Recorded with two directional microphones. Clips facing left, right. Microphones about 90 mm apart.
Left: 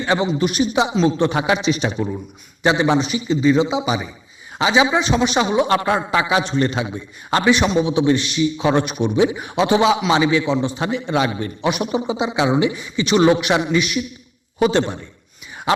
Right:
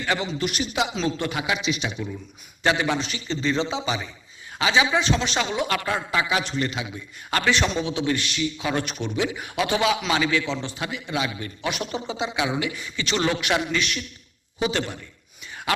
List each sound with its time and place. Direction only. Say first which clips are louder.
0.0 s a man's voice: left 7 dB; 25° left (ahead or behind); by 2.2 s 40° left (ahead or behind)
2.6 s a man's voice: left 6 dB; 20° left (ahead or behind)
6.6 s a man's voice: left 7 dB; 35° left (ahead or behind)
11.6 s a man's voice: left 8 dB; 20° left (ahead or behind)
14.7 s a man's voice: left 8 dB; 25° left (ahead or behind)